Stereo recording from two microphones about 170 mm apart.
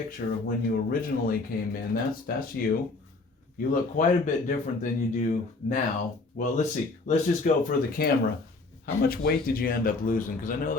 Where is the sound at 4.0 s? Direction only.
50° left (ahead or behind).